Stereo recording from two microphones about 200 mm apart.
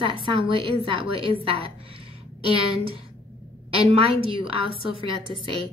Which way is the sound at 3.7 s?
30° right (ahead or behind).